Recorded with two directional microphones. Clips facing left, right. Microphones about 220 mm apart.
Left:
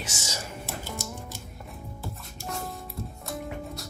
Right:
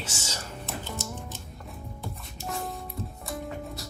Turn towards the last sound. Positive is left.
turn(degrees=0)  # may be behind; listen again after turning